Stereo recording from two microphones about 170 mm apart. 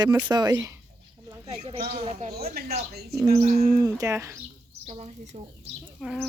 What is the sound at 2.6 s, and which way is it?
Speech, 65° right (ahead or behind).